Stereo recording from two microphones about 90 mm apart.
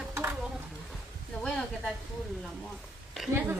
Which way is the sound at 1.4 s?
10° left (ahead or behind).